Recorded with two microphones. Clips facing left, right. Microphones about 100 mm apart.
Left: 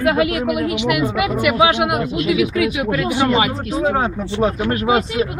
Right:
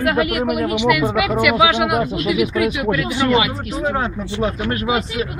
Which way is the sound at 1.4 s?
50° left (ahead or behind).